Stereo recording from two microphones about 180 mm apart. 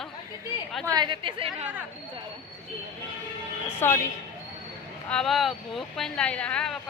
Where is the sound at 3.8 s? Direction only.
15° left (ahead or behind).